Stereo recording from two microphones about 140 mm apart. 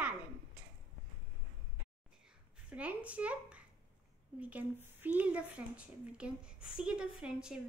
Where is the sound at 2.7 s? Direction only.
10° right (ahead or behind).